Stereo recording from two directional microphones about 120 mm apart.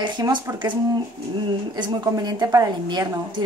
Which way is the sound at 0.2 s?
35° right (ahead or behind).